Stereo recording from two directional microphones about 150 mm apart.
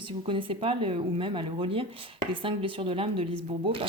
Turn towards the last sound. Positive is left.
turn(degrees=-35)  # may be behind; listen again after turning